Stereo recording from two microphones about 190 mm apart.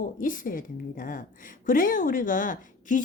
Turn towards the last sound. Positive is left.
turn(degrees=45)  # may be behind; listen again after turning